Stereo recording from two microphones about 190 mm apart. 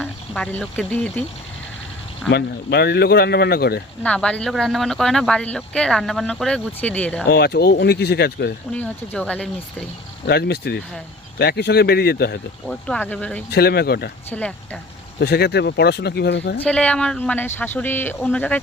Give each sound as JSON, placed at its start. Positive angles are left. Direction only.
{"t": 0.0, "sound": "speech", "side_deg": 10}
{"t": 2.3, "sound": "a man's voice", "side_deg": 60}
{"t": 4.0, "sound": "speech", "side_deg": 5}
{"t": 7.3, "sound": "a man's voice", "side_deg": 55}
{"t": 8.7, "sound": "speech", "side_deg": 10}
{"t": 10.2, "sound": "a man's voice", "side_deg": 60}
{"t": 12.6, "sound": "speech", "side_deg": 5}
{"t": 13.5, "sound": "a man's voice", "side_deg": 55}
{"t": 14.3, "sound": "speech", "side_deg": 10}
{"t": 15.2, "sound": "a man's voice", "side_deg": 60}
{"t": 16.6, "sound": "speech", "side_deg": 5}